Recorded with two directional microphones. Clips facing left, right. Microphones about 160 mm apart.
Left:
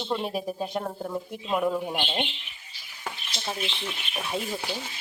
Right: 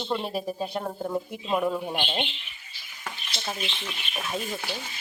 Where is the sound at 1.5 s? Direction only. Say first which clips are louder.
Even; 10° left (ahead or behind).